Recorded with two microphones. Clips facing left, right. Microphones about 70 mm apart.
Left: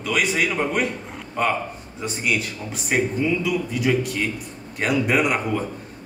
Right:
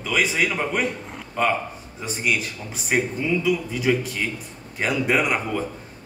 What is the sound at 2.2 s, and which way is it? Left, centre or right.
Speech, centre.